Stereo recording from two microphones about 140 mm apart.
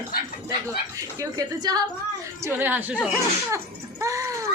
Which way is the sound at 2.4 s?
15° right (ahead or behind).